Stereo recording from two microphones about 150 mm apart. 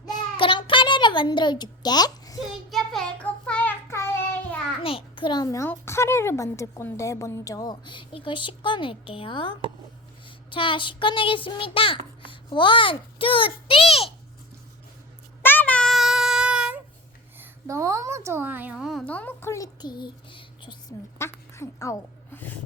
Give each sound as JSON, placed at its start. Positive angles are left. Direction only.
{"t": 0.1, "sound": "a sound", "side_deg": 35}
{"t": 2.6, "sound": "child singing", "side_deg": 0}
{"t": 4.8, "sound": "a child's voice", "side_deg": 40}
{"t": 15.4, "sound": "child singing", "side_deg": 15}
{"t": 17.3, "sound": "a woman's voice", "side_deg": -15}
{"t": 19.0, "sound": "speech", "side_deg": 10}
{"t": 21.2, "sound": "a sound", "side_deg": 15}